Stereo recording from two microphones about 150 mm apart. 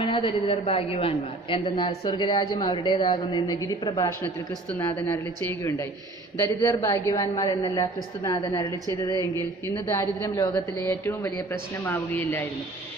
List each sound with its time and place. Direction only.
0.0 s a woman's voice: 35° left (ahead or behind)
4.2 s a woman's voice: 10° left (ahead or behind)
9.8 s a woman's voice: 20° left (ahead or behind)